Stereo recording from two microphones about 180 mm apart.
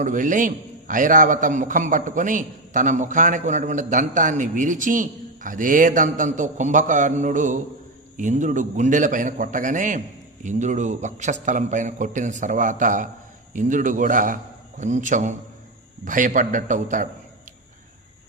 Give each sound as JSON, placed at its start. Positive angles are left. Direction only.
{"t": 0.0, "sound": "a man's voice", "side_deg": -45}